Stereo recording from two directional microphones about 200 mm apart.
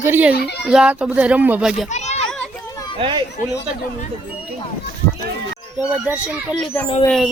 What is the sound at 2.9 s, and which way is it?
Speech, 25° right (ahead or behind).